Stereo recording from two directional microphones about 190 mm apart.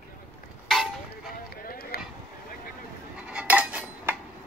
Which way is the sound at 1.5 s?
50° left (ahead or behind).